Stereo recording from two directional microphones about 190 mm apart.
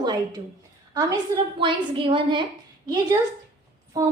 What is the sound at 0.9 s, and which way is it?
A woman's voice, 25° right (ahead or behind).